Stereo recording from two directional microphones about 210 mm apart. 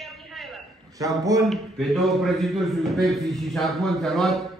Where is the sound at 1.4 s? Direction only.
Centre (ahead or behind).